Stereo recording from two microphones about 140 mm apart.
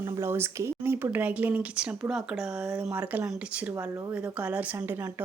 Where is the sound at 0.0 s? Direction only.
20° right (ahead or behind).